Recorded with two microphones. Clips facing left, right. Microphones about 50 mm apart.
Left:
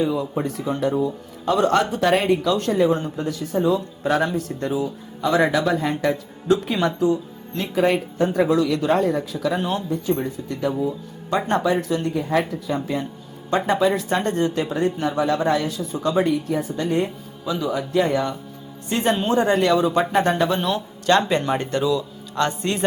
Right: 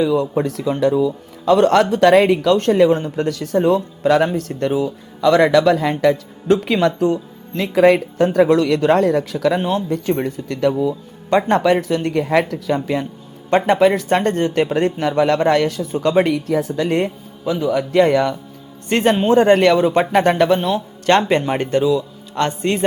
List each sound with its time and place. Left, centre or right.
0.1 s a man's voice: right
3.2 s speech: right
4.4 s speech: right
6.8 s a man's voice: right
7.7 s a man's voice: right
9.6 s speech: right
9.9 s speech: right
11.8 s a man's voice: right
13.5 s a man's voice: right
17.4 s speech: right
17.7 s a man's voice: right
18.9 s a man's voice: right
20.6 s a man's voice: centre
21.1 s speech: right